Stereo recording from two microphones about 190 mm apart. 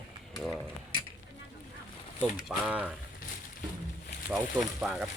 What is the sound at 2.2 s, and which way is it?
Speech, 5° right (ahead or behind).